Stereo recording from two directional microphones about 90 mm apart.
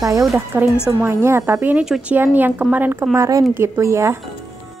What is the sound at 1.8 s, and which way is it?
Speech, 5° right (ahead or behind).